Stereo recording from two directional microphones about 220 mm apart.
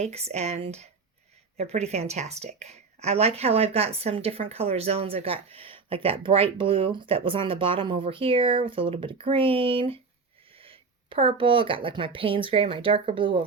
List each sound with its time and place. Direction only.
0.0 s a woman's voice: 30° right (ahead or behind)